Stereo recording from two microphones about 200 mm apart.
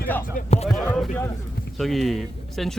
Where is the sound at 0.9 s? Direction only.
Centre (ahead or behind).